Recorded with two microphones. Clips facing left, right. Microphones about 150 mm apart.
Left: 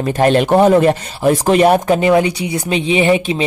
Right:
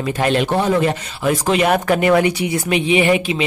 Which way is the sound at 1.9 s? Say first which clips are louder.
Left 2 dB; 25° left (ahead or behind).